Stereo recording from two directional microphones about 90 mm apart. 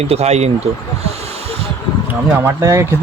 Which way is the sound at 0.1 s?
90° right.